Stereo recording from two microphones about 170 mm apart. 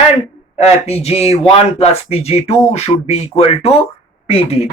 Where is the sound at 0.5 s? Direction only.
35° left (ahead or behind).